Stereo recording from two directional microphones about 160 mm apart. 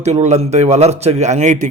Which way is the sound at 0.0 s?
45° right (ahead or behind).